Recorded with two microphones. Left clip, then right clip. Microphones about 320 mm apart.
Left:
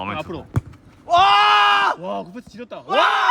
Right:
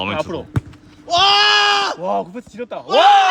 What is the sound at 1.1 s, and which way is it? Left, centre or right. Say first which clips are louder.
Sheep: right 1 dB; centre.